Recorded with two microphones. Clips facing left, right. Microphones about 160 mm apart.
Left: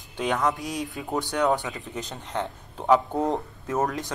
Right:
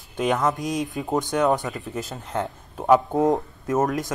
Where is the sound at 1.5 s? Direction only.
Centre (ahead or behind).